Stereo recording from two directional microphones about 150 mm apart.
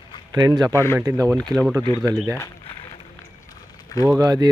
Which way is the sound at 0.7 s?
15° left (ahead or behind).